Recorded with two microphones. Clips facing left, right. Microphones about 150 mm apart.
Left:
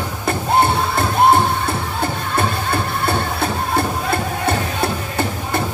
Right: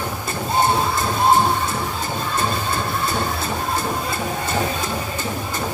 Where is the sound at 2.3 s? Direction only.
65° left (ahead or behind).